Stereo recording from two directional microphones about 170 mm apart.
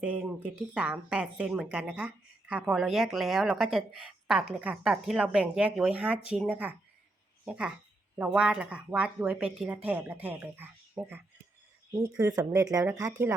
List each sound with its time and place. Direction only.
0.0 s a woman's voice: 5° right (ahead or behind)